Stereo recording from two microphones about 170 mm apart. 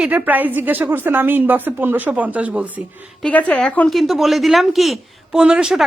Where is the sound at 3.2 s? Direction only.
5° left (ahead or behind).